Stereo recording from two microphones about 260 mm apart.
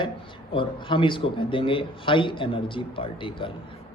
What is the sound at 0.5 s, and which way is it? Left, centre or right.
A man's voice, centre.